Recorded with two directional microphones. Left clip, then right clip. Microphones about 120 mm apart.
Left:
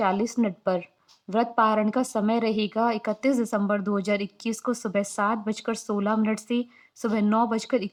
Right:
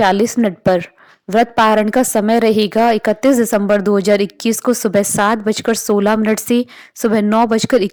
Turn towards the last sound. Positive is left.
turn(degrees=-70)  # may be behind; listen again after turning